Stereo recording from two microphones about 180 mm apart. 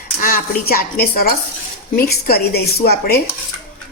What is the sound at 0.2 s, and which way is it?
A woman's voice, 55° left (ahead or behind).